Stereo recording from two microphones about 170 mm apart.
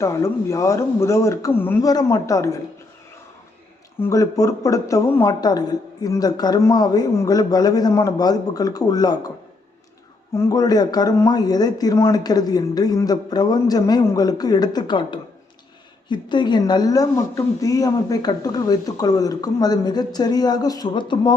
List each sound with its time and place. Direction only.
0.0 s speech: 15° left (ahead or behind)
4.0 s a woman's voice: 20° left (ahead or behind)
10.3 s a woman's voice: 20° left (ahead or behind)